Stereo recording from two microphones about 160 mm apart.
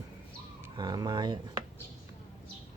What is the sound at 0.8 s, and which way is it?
Speech, 25° right (ahead or behind).